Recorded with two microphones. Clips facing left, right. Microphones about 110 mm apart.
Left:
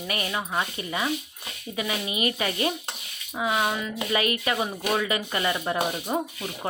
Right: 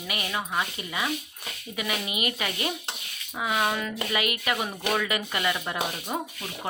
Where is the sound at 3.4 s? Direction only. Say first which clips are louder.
Left 1 dB; 20° left (ahead or behind).